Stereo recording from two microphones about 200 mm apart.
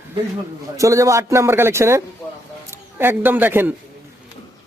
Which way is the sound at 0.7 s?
15° right (ahead or behind).